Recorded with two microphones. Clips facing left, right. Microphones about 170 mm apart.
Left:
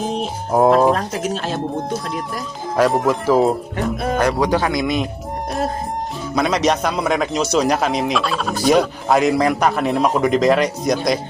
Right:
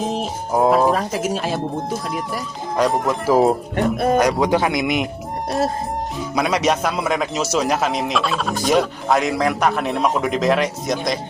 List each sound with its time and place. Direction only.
0.0 s music: centre (ahead or behind)
0.9 s a man's voice: 5° right (ahead or behind)
4.2 s speech: 20° right (ahead or behind)
6.3 s a man's voice: 10° right (ahead or behind)